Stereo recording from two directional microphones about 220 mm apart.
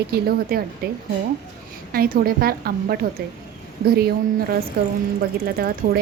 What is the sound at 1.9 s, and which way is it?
A woman's voice, 40° right (ahead or behind).